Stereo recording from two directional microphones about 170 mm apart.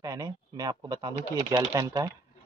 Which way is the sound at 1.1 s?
45° right (ahead or behind).